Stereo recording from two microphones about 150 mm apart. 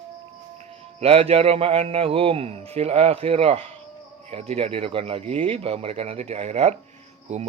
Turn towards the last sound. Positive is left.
turn(degrees=-50)  # may be behind; listen again after turning